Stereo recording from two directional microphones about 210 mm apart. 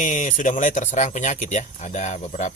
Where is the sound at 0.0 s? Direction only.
35° left (ahead or behind).